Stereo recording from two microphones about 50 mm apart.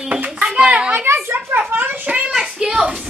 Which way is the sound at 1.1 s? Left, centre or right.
Right.